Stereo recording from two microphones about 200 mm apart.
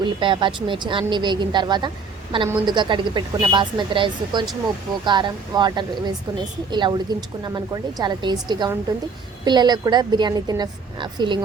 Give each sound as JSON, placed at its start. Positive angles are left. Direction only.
{"t": 0.0, "sound": "a woman's voice", "side_deg": -25}